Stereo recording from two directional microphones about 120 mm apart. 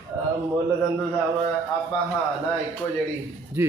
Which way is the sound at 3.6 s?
20° right (ahead or behind).